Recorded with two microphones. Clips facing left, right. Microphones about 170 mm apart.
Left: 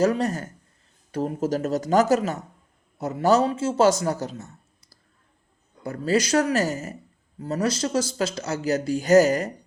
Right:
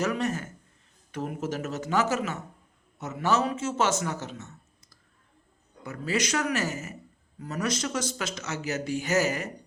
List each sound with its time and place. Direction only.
0.0 s speech: 35° left (ahead or behind)
5.8 s speech: 35° left (ahead or behind)